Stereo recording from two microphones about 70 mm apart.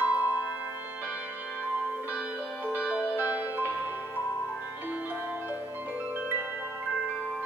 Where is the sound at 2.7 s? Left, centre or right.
Right.